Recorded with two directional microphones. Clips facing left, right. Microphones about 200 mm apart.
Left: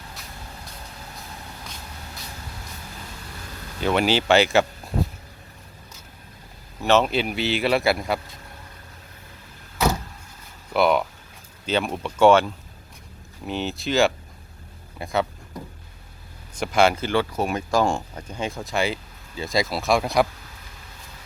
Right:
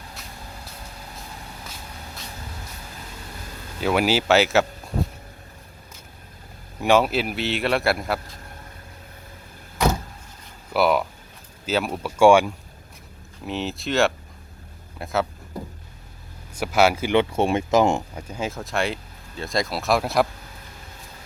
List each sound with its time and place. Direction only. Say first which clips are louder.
3.8 s a man's voice: even; 5° right (ahead or behind)
6.8 s a man's voice: right 1 dB; 10° right (ahead or behind)
9.7 s vehicle: right 1 dB; 5° left (ahead or behind)
10.7 s speech: even; 5° right (ahead or behind)
13.4 s a man's voice: even; centre (ahead or behind)
16.6 s speech: even; 5° right (ahead or behind)
17.2 s speech: right 4 dB; 25° right (ahead or behind)
18.1 s a man's voice: right 1 dB; 5° right (ahead or behind)